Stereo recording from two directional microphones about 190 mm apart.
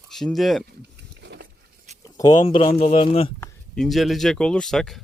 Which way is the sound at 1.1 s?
65° right (ahead or behind).